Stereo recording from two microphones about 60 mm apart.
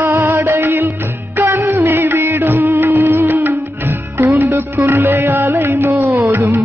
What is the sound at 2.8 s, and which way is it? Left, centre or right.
Music, right.